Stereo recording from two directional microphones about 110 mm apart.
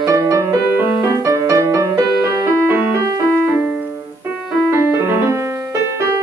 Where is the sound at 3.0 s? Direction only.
30° right (ahead or behind).